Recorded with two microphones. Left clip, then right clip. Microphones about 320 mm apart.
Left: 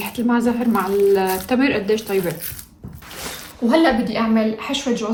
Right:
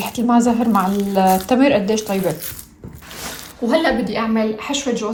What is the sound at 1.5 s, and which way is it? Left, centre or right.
Speech, centre.